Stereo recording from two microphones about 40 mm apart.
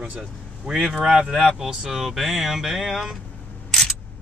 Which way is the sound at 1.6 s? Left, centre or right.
Centre.